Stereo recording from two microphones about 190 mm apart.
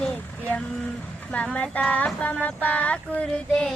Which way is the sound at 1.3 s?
5° left (ahead or behind).